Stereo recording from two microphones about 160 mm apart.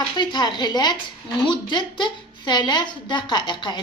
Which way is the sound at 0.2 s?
25° left (ahead or behind).